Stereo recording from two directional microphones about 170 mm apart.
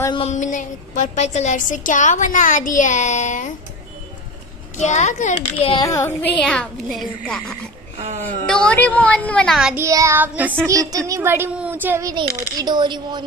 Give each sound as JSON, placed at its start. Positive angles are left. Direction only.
{"t": 0.1, "sound": "a woman's voice", "side_deg": 40}
{"t": 4.7, "sound": "a woman's voice", "side_deg": 45}
{"t": 5.9, "sound": "speech", "side_deg": 15}
{"t": 6.4, "sound": "a woman's voice", "side_deg": 5}
{"t": 9.8, "sound": "child singing", "side_deg": -20}